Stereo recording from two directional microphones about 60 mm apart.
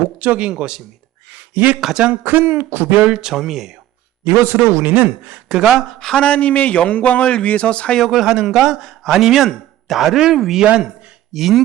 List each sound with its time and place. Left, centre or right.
0.2 s speech: right
1.3 s a sound: right
1.8 s speech: centre
2.2 s speech: right
3.1 s speech: centre
4.2 s a man's voice: right
4.8 s speech: right
5.5 s speech: centre
6.0 s speech: centre
6.2 s a man's voice: left
8.0 s speech: centre